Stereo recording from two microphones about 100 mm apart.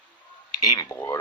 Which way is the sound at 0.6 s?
40° left (ahead or behind).